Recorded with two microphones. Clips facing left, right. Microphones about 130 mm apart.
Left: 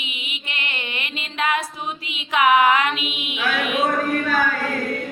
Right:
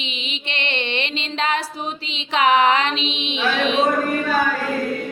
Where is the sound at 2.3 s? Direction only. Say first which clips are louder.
Even; 30° right (ahead or behind).